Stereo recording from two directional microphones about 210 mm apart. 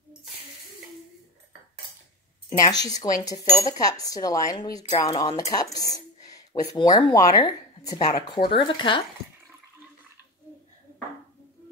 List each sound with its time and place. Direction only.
2.5 s speech: 15° left (ahead or behind)